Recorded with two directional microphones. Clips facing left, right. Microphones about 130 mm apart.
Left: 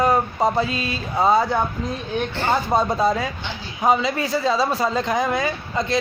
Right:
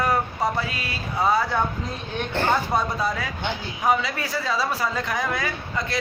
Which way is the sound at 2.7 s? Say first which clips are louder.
Left 5 dB; 25° left (ahead or behind).